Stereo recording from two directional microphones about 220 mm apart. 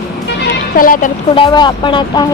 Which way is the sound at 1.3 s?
20° left (ahead or behind).